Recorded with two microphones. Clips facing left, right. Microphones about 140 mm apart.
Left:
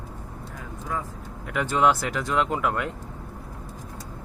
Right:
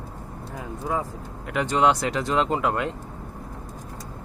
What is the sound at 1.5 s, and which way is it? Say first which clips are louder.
Speech: right 1 dB; 20° right (ahead or behind).